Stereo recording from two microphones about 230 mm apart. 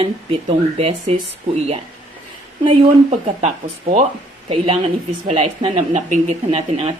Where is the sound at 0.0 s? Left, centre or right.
Right.